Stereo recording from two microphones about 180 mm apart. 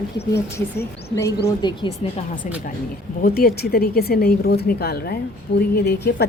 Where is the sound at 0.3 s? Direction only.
15° left (ahead or behind).